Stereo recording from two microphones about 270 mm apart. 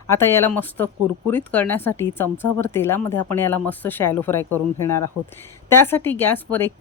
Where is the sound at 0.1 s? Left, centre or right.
Centre.